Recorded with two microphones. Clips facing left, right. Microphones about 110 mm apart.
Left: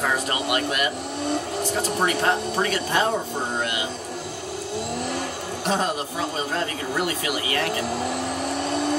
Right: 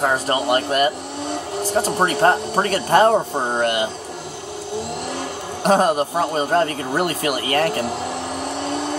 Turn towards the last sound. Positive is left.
turn(degrees=-45)  # may be behind; listen again after turning